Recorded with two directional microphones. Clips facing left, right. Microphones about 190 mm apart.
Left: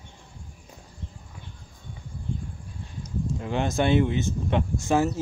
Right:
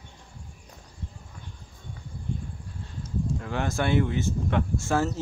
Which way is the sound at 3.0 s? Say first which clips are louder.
Even; 20° left (ahead or behind).